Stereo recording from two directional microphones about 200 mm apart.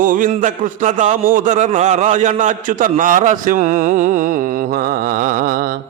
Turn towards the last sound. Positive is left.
turn(degrees=-45)  # may be behind; listen again after turning